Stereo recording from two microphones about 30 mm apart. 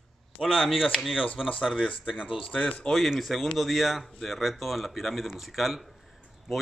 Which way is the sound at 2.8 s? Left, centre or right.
Left.